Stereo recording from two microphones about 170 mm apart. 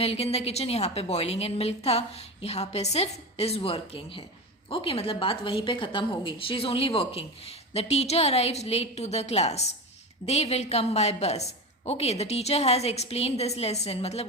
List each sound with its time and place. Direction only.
0.0 s a woman's voice: 35° left (ahead or behind)